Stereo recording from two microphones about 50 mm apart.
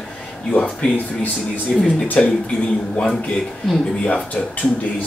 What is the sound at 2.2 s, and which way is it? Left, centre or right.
Speech, centre.